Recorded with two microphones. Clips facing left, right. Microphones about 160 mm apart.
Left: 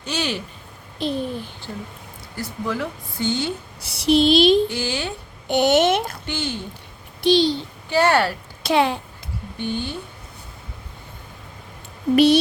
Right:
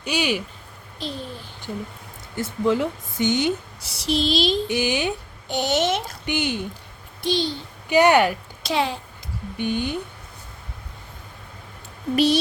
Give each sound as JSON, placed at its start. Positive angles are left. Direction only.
{"t": 0.0, "sound": "speech", "side_deg": -15}
{"t": 1.0, "sound": "speech", "side_deg": 60}
{"t": 2.3, "sound": "speech", "side_deg": -20}
{"t": 3.8, "sound": "speech", "side_deg": 60}
{"t": 4.7, "sound": "speech", "side_deg": -15}
{"t": 5.5, "sound": "speech", "side_deg": 60}
{"t": 6.2, "sound": "speech", "side_deg": -15}
{"t": 7.3, "sound": "a child's voice", "side_deg": 75}
{"t": 7.9, "sound": "speech", "side_deg": -15}
{"t": 8.6, "sound": "speech", "side_deg": 60}
{"t": 9.6, "sound": "speech", "side_deg": -15}
{"t": 12.1, "sound": "speech", "side_deg": 65}